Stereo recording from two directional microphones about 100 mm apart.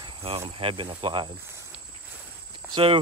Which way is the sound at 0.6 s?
65° right (ahead or behind).